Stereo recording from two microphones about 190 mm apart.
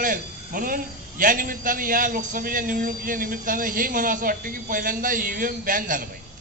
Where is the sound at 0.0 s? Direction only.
45° right (ahead or behind).